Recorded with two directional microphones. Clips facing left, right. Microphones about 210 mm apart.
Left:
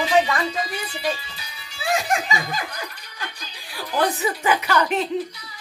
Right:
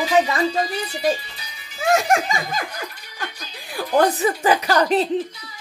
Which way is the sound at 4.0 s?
35° right (ahead or behind).